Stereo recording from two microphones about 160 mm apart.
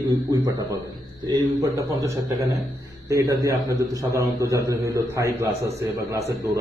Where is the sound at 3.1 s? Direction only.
20° right (ahead or behind).